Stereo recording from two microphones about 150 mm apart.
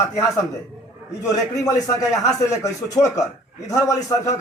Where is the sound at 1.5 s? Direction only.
20° left (ahead or behind).